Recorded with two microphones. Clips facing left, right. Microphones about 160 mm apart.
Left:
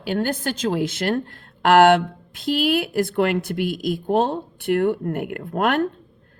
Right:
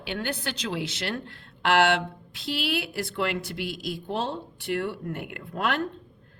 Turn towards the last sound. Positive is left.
turn(degrees=55)  # may be behind; listen again after turning